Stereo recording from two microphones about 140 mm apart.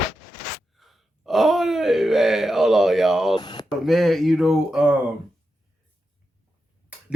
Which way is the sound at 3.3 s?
30° left (ahead or behind).